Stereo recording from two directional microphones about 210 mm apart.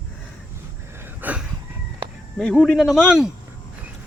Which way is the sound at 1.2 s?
10° right (ahead or behind).